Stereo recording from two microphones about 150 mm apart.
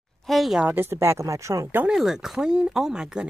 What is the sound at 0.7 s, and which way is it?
Speech, 15° right (ahead or behind).